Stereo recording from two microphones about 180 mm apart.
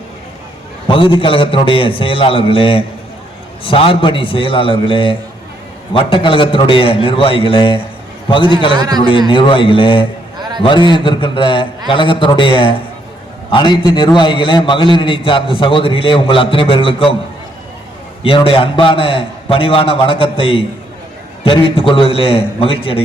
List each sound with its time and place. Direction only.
0.9 s a man's voice: 30° left (ahead or behind)
8.8 s a man's voice: 20° right (ahead or behind)
9.0 s a man's voice: 30° left (ahead or behind)
18.2 s a man's voice: 30° left (ahead or behind)